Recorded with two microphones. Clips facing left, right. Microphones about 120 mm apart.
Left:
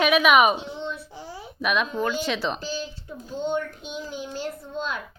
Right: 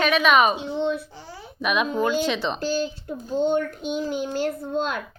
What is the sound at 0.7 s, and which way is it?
Babbling, 55° right (ahead or behind).